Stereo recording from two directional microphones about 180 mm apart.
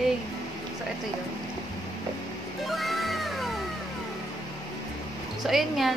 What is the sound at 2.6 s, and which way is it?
Music, centre (ahead or behind).